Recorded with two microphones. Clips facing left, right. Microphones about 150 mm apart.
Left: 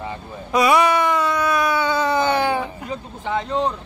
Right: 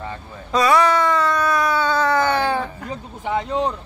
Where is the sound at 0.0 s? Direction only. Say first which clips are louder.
Left 2 dB; 15° left (ahead or behind).